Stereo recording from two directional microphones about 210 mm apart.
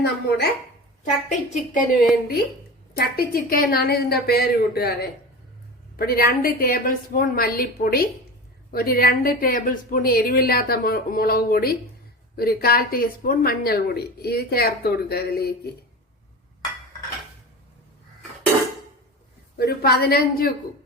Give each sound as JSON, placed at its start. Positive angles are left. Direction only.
{"t": 0.0, "sound": "a woman's voice", "side_deg": 50}
{"t": 1.3, "sound": "a woman's voice", "side_deg": 40}
{"t": 6.0, "sound": "a woman's voice", "side_deg": 45}
{"t": 19.5, "sound": "a woman's voice", "side_deg": 50}